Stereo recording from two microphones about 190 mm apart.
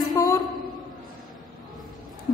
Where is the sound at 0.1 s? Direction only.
20° left (ahead or behind).